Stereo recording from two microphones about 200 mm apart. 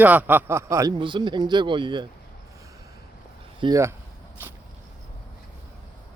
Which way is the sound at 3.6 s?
20° right (ahead or behind).